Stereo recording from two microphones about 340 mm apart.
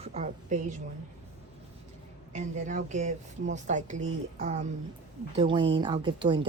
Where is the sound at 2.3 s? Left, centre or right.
Right.